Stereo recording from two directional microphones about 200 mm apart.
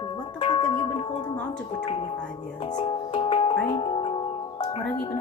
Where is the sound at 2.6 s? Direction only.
25° left (ahead or behind).